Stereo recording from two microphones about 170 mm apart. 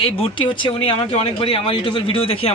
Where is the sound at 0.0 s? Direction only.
30° left (ahead or behind).